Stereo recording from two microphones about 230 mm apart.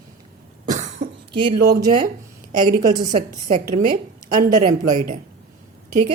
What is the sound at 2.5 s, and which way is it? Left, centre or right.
A woman's voice, right.